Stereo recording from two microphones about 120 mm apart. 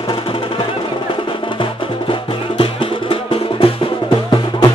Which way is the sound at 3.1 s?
50° left (ahead or behind).